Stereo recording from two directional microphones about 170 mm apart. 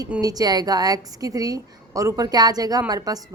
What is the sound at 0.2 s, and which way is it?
A woman's voice, 20° right (ahead or behind).